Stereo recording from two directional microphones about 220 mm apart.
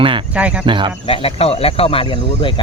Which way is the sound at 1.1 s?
25° left (ahead or behind).